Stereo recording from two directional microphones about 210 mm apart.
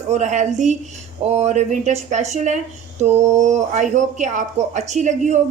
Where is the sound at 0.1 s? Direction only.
35° right (ahead or behind).